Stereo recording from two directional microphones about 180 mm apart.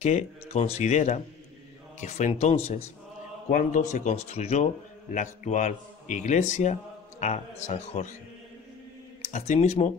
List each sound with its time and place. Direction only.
0.0 s speech: 40° left (ahead or behind)
3.4 s a man's voice: 50° left (ahead or behind)
9.3 s speech: 40° left (ahead or behind)